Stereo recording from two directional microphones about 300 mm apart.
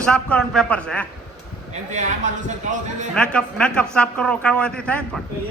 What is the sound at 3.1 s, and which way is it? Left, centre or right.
A man's voice, centre.